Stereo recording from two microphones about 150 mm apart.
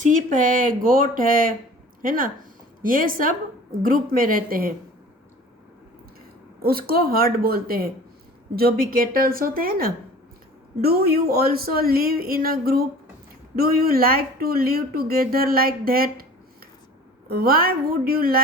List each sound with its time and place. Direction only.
0.0 s a woman's voice: 60° right (ahead or behind)
6.6 s a woman's voice: 85° right
17.2 s speech: 85° right